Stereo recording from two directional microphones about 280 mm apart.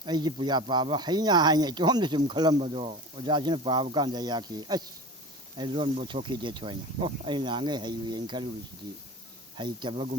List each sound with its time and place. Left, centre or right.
0.0 s speech: centre
9.6 s speech: centre